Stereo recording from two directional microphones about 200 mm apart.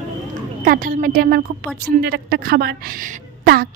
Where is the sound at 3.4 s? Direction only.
50° right (ahead or behind).